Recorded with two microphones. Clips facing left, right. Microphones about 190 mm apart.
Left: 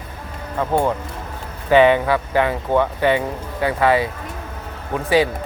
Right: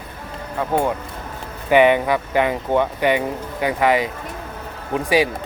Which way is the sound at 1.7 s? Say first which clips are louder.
Left 1 dB; 15° right (ahead or behind).